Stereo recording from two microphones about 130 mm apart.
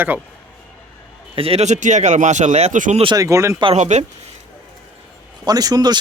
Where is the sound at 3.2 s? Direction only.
25° right (ahead or behind).